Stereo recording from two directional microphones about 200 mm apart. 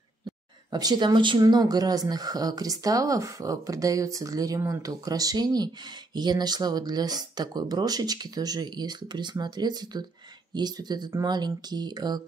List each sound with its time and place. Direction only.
0.7 s speech: 20° right (ahead or behind)